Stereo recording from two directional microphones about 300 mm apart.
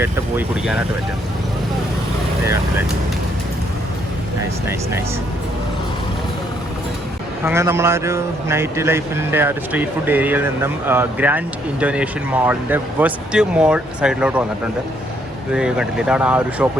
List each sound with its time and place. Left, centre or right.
0.0 s speech: centre
7.4 s speech: centre
15.5 s speech: centre